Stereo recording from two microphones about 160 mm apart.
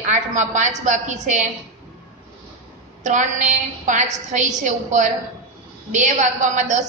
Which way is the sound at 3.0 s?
50° right (ahead or behind).